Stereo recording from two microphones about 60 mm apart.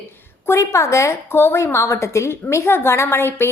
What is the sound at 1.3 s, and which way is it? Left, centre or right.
A woman's voice, left.